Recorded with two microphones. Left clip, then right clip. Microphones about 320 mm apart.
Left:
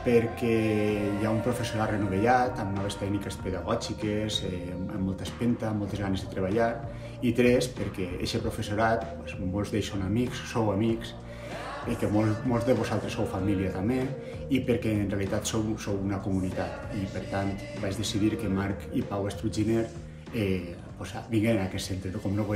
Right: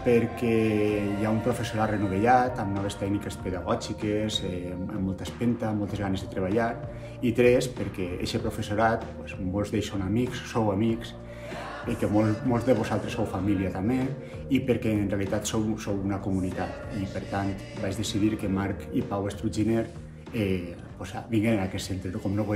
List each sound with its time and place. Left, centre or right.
0.0 s speech: centre